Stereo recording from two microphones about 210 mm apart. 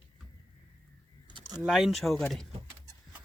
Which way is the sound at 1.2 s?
20° right (ahead or behind).